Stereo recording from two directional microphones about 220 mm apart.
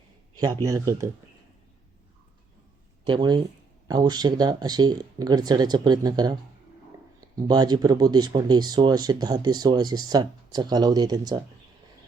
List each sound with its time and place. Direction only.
0.3 s speech: 15° right (ahead or behind)
3.1 s speech: 20° right (ahead or behind)